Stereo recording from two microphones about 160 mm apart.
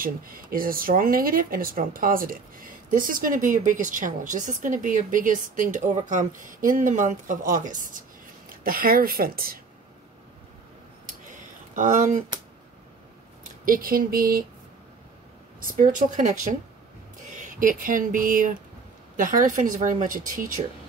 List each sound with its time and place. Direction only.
0.0 s speech: 65° right (ahead or behind)
11.7 s speech: 50° right (ahead or behind)
13.7 s speech: 65° right (ahead or behind)
15.6 s speech: 60° right (ahead or behind)
17.3 s speech: 55° right (ahead or behind)